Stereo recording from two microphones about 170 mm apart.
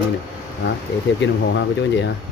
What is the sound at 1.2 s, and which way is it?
Speech, 90° left.